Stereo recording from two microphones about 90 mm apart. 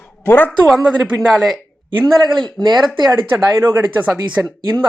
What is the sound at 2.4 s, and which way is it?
Speech, 50° right (ahead or behind).